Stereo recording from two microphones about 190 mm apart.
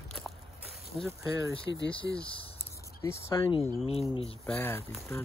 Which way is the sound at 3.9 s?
30° left (ahead or behind).